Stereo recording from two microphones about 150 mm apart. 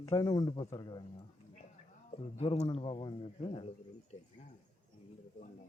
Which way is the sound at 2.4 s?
45° left (ahead or behind).